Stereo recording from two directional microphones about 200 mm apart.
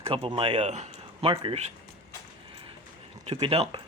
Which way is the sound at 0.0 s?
25° right (ahead or behind).